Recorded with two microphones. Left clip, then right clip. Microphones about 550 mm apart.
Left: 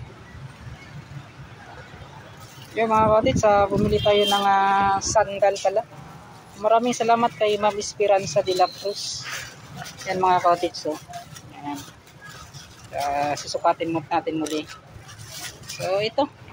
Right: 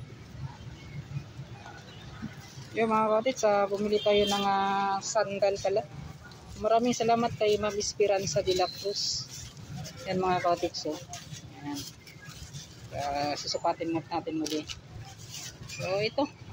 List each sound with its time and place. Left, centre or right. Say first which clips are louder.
2.7 s speech: left 8 dB; right
13.1 s speech: left 5 dB; right
15.9 s speech: left 7 dB; right